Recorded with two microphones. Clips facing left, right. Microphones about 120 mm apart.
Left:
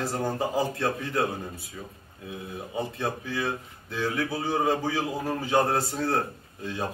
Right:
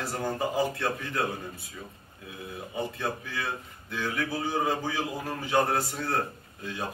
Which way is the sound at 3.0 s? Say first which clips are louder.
Left 3 dB; 25° left (ahead or behind).